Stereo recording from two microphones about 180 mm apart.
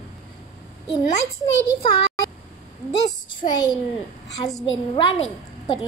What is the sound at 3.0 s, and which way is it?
Speech, 25° left (ahead or behind).